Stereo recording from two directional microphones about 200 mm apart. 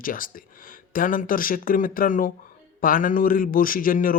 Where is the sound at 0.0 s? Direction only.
45° left (ahead or behind).